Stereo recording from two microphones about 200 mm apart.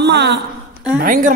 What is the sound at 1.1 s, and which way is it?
Speech, 45° right (ahead or behind).